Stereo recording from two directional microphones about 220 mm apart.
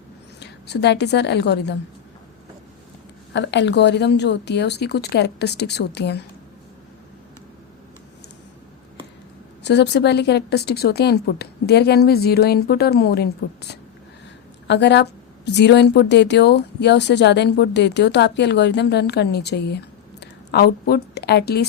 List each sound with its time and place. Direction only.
0.3 s a woman's voice: 50° left (ahead or behind)
3.3 s speech: 55° left (ahead or behind)
9.6 s a woman's voice: 50° left (ahead or behind)